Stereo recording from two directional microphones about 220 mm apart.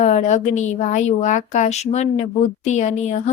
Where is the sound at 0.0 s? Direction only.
30° left (ahead or behind).